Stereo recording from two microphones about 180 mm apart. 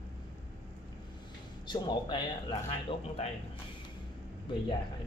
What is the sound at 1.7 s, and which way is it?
Speech, 25° left (ahead or behind).